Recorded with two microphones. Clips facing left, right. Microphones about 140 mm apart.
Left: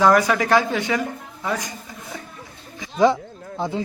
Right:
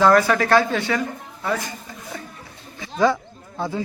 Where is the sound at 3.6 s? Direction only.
20° left (ahead or behind).